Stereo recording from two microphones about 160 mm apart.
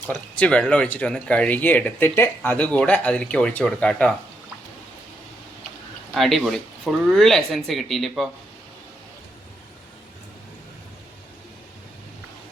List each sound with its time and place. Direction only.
0.1 s speech: 5° left (ahead or behind)
6.1 s speech: centre (ahead or behind)